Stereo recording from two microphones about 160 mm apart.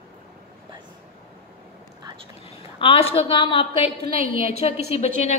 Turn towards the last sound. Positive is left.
turn(degrees=40)  # may be behind; listen again after turning